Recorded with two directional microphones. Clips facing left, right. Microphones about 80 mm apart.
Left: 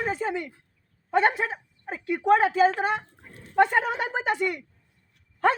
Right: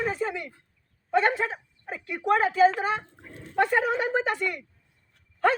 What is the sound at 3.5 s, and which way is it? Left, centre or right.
A woman's voice, centre.